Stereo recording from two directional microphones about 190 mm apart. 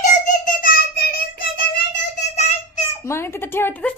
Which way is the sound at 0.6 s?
50° left (ahead or behind).